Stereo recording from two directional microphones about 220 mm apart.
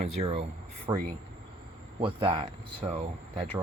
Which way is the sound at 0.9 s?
15° right (ahead or behind).